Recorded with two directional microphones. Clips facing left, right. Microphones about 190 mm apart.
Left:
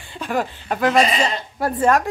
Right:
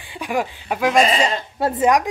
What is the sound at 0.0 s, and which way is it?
A woman's voice, 15° right (ahead or behind).